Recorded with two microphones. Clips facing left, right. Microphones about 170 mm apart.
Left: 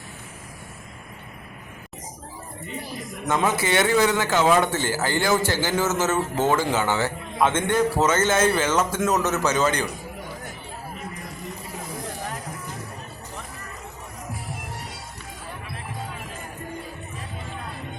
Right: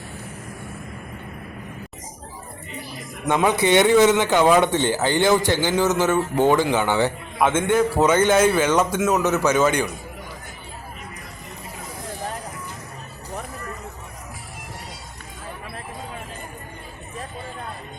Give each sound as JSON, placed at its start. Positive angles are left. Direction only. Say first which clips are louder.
{"t": 3.2, "sound": "a man's voice", "louder": "right 4 dB", "side_deg": -15}